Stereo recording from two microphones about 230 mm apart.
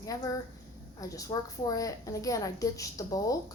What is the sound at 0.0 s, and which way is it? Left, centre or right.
A woman's voice, centre.